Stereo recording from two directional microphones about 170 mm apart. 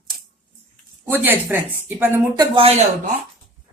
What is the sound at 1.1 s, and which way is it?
A woman's voice, 10° right (ahead or behind).